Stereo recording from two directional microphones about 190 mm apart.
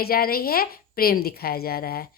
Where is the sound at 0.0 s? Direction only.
55° left (ahead or behind).